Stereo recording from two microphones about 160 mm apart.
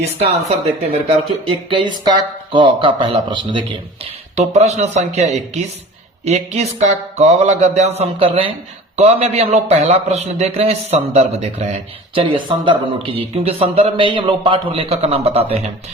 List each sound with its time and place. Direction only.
0.2 s speech: 40° right (ahead or behind)
1.7 s speech: 30° right (ahead or behind)
4.4 s speech: 45° right (ahead or behind)